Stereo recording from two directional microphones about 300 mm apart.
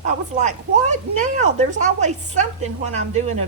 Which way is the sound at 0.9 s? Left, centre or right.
Right.